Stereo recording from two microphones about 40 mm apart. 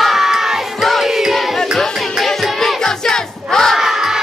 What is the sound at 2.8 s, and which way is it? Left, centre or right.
Battle cry, centre.